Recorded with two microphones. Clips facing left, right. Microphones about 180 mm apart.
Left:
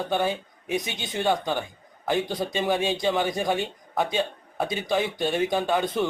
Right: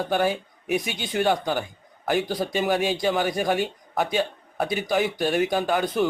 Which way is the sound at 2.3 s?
25° left (ahead or behind).